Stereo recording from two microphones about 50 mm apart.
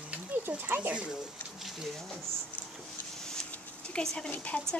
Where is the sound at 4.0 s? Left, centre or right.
Left.